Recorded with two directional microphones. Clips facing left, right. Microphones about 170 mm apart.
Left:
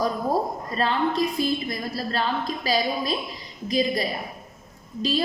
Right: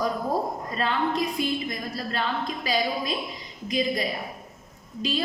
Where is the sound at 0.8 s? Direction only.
35° left (ahead or behind).